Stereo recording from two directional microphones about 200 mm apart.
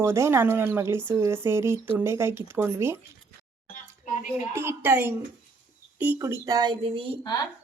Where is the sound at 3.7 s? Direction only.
40° left (ahead or behind).